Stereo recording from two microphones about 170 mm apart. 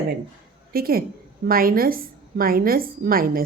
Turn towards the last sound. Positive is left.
turn(degrees=-60)  # may be behind; listen again after turning